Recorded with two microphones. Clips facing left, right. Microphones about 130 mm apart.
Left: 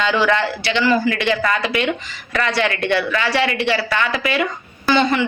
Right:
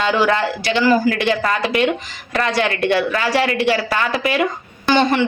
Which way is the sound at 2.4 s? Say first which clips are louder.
Right 2 dB; 45° right (ahead or behind).